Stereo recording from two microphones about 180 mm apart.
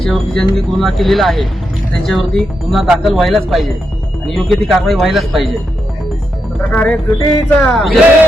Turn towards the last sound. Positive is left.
turn(degrees=5)  # may be behind; listen again after turning